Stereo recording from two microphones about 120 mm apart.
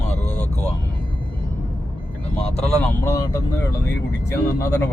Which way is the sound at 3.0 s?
25° left (ahead or behind).